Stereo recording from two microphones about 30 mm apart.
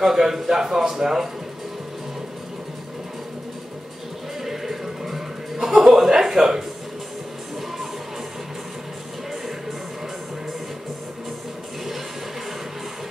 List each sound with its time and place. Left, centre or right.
0.0 s a man's voice: centre
4.5 s music: centre
6.1 s a sound: centre